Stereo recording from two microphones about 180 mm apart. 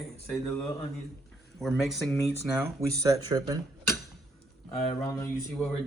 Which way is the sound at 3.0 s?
20° right (ahead or behind).